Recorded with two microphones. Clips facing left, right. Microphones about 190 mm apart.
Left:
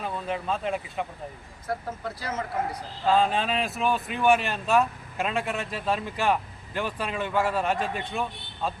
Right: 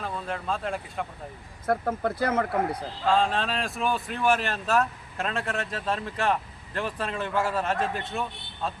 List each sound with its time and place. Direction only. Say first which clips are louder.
0.0 s speech: left 2 dB; 5° left (ahead or behind)
1.6 s speech: right 6 dB; 55° right (ahead or behind)
3.1 s speech: left 1 dB; 5° left (ahead or behind)